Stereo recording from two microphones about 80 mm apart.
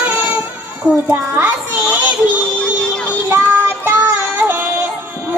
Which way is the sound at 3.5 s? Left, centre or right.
Right.